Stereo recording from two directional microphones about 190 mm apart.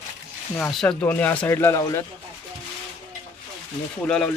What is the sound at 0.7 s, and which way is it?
Speech, 5° left (ahead or behind).